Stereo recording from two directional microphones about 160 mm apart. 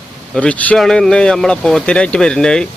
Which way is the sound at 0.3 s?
10° left (ahead or behind).